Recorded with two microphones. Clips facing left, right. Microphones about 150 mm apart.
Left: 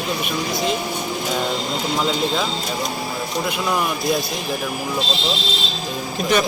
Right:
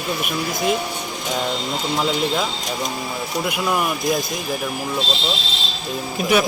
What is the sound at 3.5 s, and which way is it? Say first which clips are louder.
Speech: right 1 dB; 5° right (ahead or behind).